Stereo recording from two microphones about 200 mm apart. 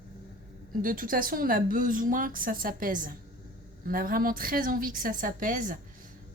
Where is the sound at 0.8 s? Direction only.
45° right (ahead or behind).